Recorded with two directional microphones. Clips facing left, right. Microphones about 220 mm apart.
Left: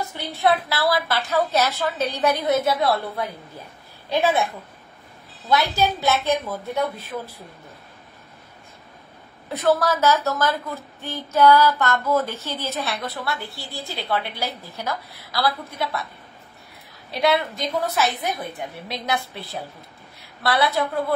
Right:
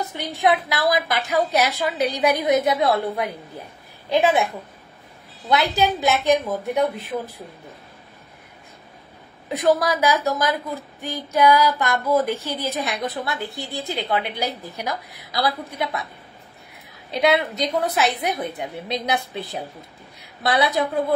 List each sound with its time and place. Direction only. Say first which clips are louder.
0.1 s a woman's voice: right 1 dB; 15° right (ahead or behind)
5.5 s a woman's voice: right 1 dB; 20° right (ahead or behind)
9.5 s a woman's voice: right 1 dB; 15° right (ahead or behind)
17.1 s a woman's voice: right 2 dB; 20° right (ahead or behind)